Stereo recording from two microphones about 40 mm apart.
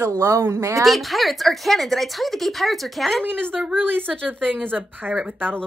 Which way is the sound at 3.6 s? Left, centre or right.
Right.